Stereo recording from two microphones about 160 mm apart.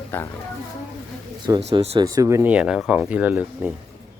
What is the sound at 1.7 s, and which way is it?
Speech, 40° right (ahead or behind).